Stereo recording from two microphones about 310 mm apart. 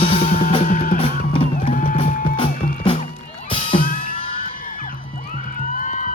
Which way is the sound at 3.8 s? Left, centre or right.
Left.